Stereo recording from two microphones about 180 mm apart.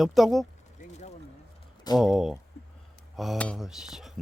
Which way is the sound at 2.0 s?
Centre (ahead or behind).